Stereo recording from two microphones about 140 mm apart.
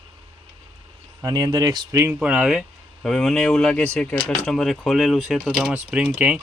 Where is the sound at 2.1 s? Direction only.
5° right (ahead or behind).